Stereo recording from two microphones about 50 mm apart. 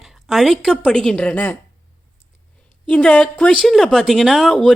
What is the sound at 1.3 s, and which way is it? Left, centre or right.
Speech, left.